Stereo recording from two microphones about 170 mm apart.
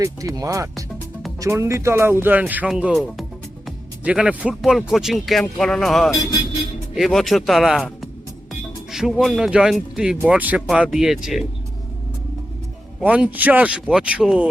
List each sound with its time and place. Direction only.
0.0 s speech: 20° right (ahead or behind); by 11.4 s centre (ahead or behind)
13.0 s speech: 5° right (ahead or behind)